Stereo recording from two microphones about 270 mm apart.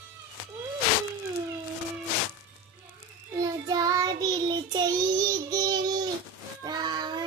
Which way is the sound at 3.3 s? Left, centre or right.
Centre.